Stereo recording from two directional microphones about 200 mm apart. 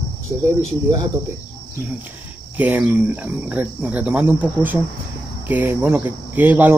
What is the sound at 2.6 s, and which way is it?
Speech, 10° right (ahead or behind).